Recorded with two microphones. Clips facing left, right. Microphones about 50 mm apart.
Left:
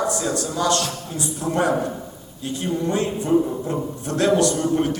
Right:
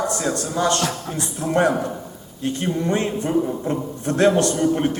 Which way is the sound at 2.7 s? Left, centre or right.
Right.